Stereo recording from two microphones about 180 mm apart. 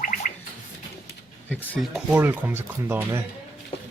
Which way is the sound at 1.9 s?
10° right (ahead or behind).